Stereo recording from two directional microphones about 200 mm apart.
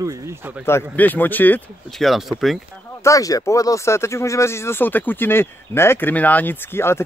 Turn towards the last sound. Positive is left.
turn(degrees=10)  # may be behind; listen again after turning